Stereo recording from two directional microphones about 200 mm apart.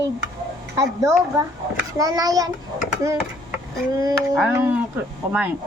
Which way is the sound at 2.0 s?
20° right (ahead or behind).